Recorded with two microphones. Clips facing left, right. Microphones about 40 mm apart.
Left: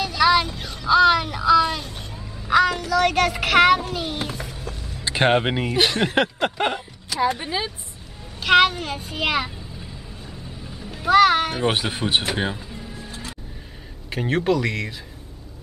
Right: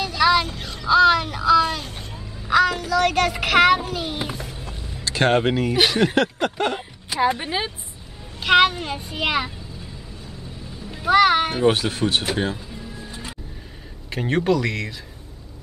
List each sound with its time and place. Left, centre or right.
0.0 s vehicle: centre
0.8 s a sound: centre
1.9 s fowl: right
2.4 s child singing: centre
5.0 s speech: centre
5.9 s a child's voice: centre
6.1 s a sound: centre
7.1 s speech: centre
8.4 s a child's voice: centre
10.9 s speech: centre
11.6 s speech: centre
13.1 s music: centre
14.1 s a child's voice: centre